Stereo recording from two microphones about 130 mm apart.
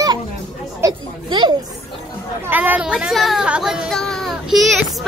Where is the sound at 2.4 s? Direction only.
15° right (ahead or behind).